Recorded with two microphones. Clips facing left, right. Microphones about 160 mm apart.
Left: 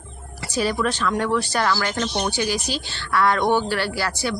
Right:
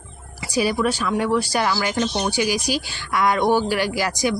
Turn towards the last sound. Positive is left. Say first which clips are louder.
# right 3 dB
turn(degrees=-15)  # may be behind; listen again after turning